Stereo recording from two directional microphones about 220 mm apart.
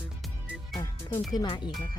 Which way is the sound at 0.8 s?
10° left (ahead or behind).